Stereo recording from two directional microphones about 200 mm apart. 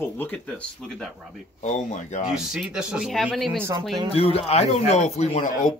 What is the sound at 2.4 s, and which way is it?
Speech, centre (ahead or behind).